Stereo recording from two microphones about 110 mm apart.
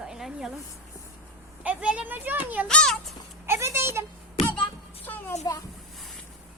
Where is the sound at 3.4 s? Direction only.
25° right (ahead or behind).